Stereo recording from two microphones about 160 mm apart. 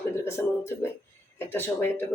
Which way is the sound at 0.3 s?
15° left (ahead or behind).